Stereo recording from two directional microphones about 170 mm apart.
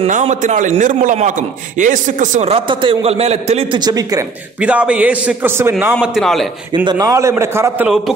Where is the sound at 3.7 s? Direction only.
25° right (ahead or behind).